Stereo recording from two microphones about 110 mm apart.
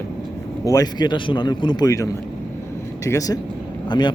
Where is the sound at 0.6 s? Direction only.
35° left (ahead or behind).